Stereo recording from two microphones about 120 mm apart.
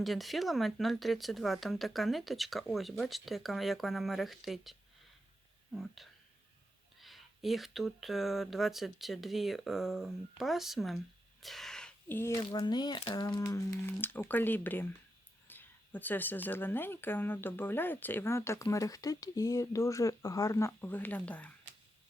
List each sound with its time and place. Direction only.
0.0 s speech: centre (ahead or behind)
11.4 s a sound: centre (ahead or behind)
12.0 s speech: 20° left (ahead or behind)
12.6 s speech: 35° left (ahead or behind); by 21.5 s 10° left (ahead or behind)